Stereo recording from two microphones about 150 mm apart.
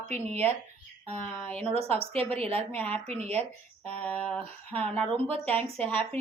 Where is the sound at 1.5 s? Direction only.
10° left (ahead or behind).